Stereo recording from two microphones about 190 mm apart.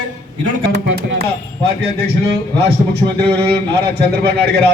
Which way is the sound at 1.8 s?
55° right (ahead or behind).